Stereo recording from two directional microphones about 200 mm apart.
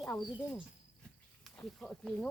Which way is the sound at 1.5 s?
5° left (ahead or behind).